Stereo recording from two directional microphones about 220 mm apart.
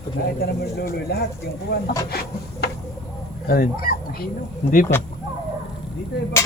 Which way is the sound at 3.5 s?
40° left (ahead or behind).